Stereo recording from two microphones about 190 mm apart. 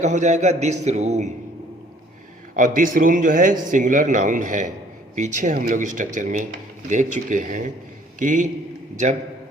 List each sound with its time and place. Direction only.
0.0 s a man's voice: 40° right (ahead or behind)
2.6 s a man's voice: 45° right (ahead or behind)